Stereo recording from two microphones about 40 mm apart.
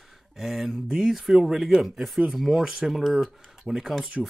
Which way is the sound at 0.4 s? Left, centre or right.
Centre.